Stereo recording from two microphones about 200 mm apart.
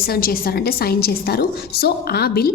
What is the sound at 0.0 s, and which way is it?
A woman's voice, 50° left (ahead or behind).